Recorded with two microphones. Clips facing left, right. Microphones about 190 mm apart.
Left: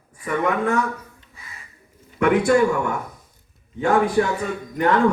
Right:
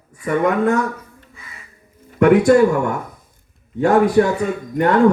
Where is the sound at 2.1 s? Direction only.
40° right (ahead or behind).